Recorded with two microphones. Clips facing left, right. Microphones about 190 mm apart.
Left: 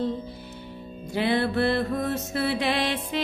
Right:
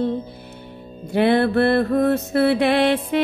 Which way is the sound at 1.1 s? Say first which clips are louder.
Right 7 dB; 60° right (ahead or behind).